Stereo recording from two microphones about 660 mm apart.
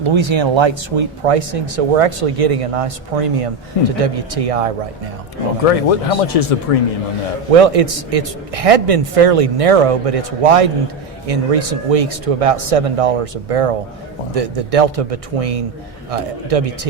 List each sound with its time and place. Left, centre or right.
0.0 s a man's voice: right
5.6 s speech: left
7.5 s a man's voice: right